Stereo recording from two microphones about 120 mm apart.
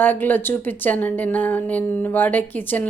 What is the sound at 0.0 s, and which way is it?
Speech, 15° left (ahead or behind).